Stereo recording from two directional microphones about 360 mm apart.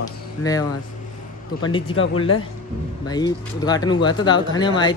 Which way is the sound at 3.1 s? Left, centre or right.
Centre.